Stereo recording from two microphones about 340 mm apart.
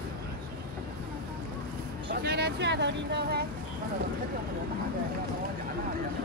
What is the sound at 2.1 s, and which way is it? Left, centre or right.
Speech, right.